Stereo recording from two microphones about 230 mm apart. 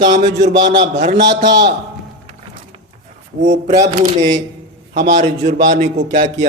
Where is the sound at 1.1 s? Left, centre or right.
Right.